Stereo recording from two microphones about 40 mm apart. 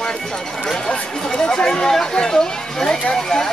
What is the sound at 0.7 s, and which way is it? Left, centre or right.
Chatter, centre.